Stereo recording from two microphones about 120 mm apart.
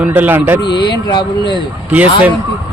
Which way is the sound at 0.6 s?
40° left (ahead or behind).